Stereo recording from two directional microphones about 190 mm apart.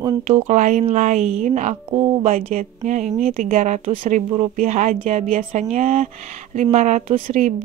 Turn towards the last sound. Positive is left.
turn(degrees=-40)  # may be behind; listen again after turning